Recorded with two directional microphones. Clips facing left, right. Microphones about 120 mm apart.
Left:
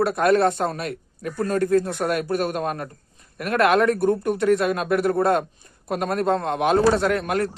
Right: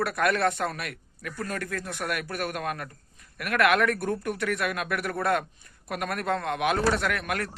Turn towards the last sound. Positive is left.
turn(degrees=25)  # may be behind; listen again after turning